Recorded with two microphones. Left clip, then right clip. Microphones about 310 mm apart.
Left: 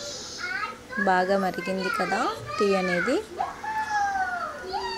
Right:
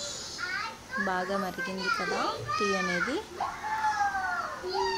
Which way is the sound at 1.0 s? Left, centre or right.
Centre.